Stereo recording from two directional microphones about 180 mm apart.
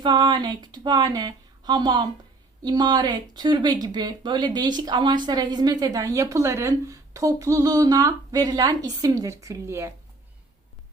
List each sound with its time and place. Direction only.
0.0 s speech: 25° right (ahead or behind)